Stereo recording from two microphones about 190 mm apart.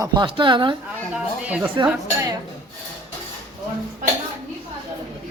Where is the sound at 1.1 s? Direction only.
10° right (ahead or behind).